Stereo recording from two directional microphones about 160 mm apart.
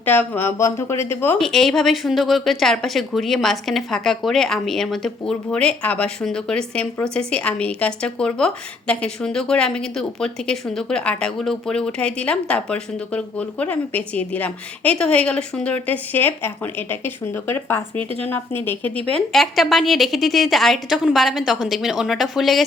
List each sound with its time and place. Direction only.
0.0 s speech: 10° left (ahead or behind)
1.4 s a woman's voice: centre (ahead or behind)